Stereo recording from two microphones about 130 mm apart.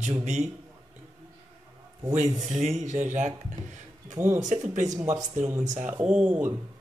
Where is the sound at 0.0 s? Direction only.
60° right (ahead or behind).